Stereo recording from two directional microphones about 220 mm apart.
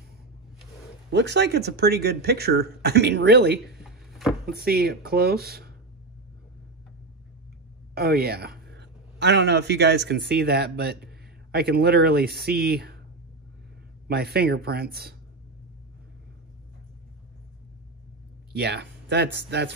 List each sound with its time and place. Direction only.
1.1 s speech: 50° right (ahead or behind)
7.9 s speech: 45° right (ahead or behind)
14.0 s speech: 45° right (ahead or behind)
18.5 s speech: 50° right (ahead or behind)